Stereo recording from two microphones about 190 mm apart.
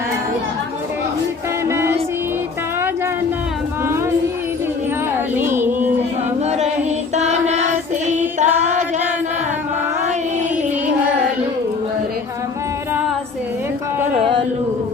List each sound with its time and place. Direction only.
1.6 s child singing: 15° right (ahead or behind)
5.1 s music: 10° right (ahead or behind)
6.4 s singing: 35° right (ahead or behind)
7.2 s child singing: 35° right (ahead or behind)
8.4 s female singing: 40° right (ahead or behind)
14.1 s a sound: 30° right (ahead or behind)